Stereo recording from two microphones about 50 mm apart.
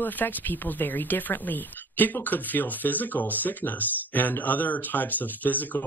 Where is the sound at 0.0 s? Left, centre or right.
Left.